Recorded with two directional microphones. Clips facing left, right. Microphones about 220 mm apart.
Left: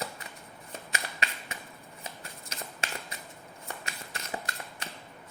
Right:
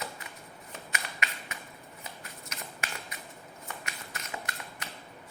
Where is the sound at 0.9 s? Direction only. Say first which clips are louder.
Left 1 dB; 30° left (ahead or behind).